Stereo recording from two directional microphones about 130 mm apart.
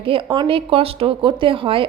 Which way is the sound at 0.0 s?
40° right (ahead or behind).